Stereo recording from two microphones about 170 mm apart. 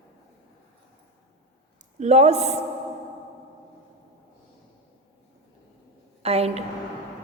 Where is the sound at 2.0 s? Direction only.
40° right (ahead or behind).